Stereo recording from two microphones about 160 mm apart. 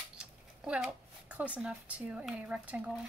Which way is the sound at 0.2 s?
5° right (ahead or behind).